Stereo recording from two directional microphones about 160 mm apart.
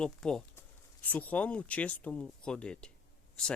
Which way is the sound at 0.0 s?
5° left (ahead or behind).